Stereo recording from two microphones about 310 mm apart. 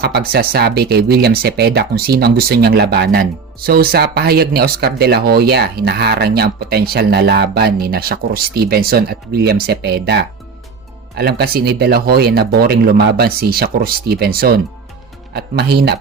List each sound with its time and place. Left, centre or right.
0.0 s speech: right